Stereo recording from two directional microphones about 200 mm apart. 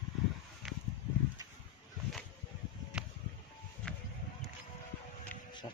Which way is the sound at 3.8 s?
5° left (ahead or behind).